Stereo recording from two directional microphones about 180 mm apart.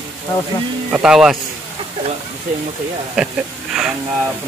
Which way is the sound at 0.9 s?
5° right (ahead or behind).